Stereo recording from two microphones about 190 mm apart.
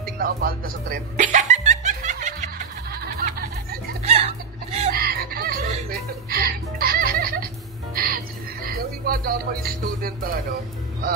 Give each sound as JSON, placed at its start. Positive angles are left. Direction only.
{"t": 0.0, "sound": "music", "side_deg": -50}
{"t": 3.2, "sound": "music", "side_deg": -50}
{"t": 4.0, "sound": "a sound", "side_deg": -35}
{"t": 5.0, "sound": "music", "side_deg": -55}
{"t": 8.6, "sound": "speech", "side_deg": -50}